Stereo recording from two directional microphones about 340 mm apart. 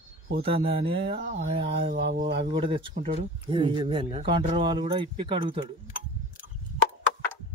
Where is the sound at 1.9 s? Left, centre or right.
Right.